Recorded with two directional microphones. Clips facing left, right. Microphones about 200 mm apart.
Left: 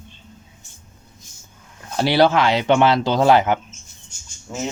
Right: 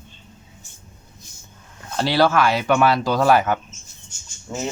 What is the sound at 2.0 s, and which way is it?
Speech, 15° left (ahead or behind).